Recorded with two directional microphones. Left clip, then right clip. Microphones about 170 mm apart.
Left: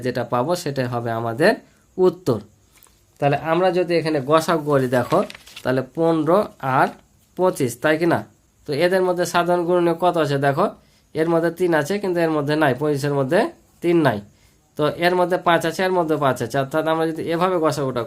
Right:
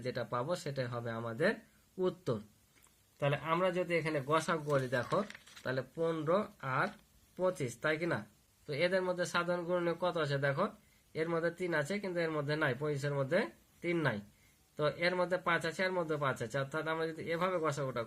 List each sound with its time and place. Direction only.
0.0 s speech: 40° left (ahead or behind)
3.2 s speech: 20° left (ahead or behind)
4.4 s speech: 30° left (ahead or behind)